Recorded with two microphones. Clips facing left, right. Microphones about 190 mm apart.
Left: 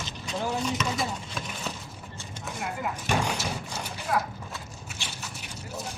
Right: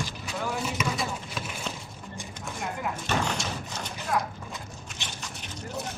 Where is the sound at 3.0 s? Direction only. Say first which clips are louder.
Left 2 dB; 10° left (ahead or behind).